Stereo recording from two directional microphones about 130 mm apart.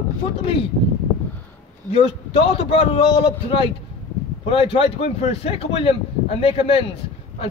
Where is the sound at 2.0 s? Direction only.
45° left (ahead or behind).